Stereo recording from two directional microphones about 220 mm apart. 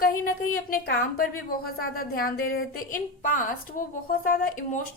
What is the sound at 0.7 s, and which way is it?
A woman's voice, 40° left (ahead or behind).